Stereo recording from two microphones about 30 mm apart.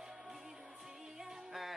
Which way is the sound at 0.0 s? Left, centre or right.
Centre.